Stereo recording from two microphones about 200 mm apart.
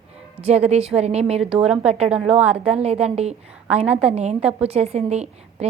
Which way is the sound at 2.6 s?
30° right (ahead or behind).